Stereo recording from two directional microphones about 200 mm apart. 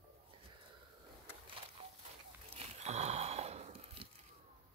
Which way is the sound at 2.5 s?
35° right (ahead or behind).